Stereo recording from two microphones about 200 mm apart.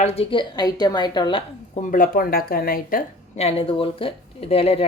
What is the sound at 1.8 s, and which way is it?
A woman's voice, 40° left (ahead or behind).